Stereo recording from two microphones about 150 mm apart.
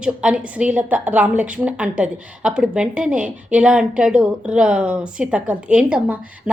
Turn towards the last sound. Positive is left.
turn(degrees=-10)  # may be behind; listen again after turning